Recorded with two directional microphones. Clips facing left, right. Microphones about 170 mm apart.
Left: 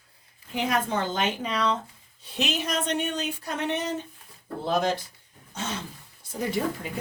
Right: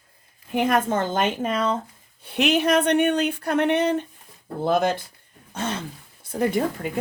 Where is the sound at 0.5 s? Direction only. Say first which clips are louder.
Right 5 dB; 50° right (ahead or behind).